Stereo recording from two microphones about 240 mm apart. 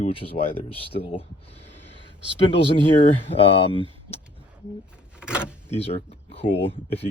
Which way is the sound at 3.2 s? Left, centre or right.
Left.